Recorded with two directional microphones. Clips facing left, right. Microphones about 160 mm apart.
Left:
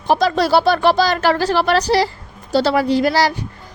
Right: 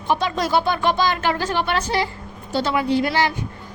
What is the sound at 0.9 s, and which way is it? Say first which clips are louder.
A woman's voice: left 5 dB; 35° left (ahead or behind).